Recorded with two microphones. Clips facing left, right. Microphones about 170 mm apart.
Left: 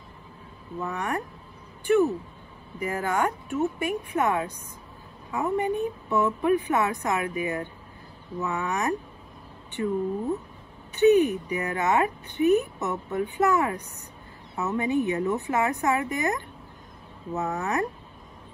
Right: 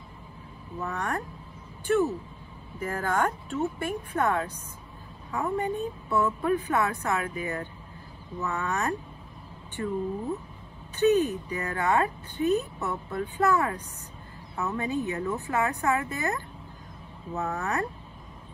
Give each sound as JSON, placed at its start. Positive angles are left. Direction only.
{"t": 0.7, "sound": "a woman's voice", "side_deg": 15}
{"t": 11.0, "sound": "a woman's voice", "side_deg": 15}
{"t": 14.8, "sound": "a woman's voice", "side_deg": 20}